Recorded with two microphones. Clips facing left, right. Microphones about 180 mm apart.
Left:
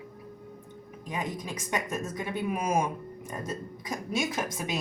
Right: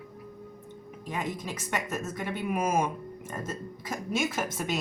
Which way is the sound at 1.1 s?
15° left (ahead or behind).